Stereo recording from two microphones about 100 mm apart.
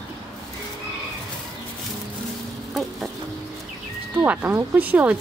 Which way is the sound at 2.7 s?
Centre (ahead or behind).